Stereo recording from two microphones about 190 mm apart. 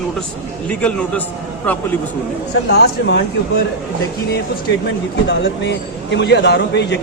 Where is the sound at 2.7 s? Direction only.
60° left (ahead or behind).